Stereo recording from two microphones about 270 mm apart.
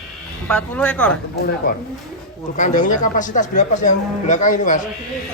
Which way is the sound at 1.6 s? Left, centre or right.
Left.